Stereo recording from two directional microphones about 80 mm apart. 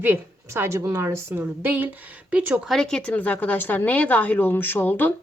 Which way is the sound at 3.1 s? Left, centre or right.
Left.